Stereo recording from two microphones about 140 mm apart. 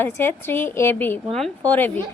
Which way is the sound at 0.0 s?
15° left (ahead or behind).